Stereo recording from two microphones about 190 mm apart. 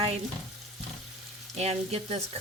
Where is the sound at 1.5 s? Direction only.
35° right (ahead or behind).